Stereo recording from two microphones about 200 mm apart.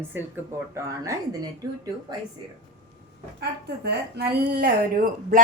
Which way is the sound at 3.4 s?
55° right (ahead or behind).